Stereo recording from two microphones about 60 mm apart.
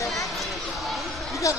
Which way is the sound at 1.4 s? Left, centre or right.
Left.